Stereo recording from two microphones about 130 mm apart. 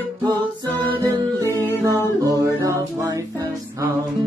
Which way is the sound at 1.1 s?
25° right (ahead or behind).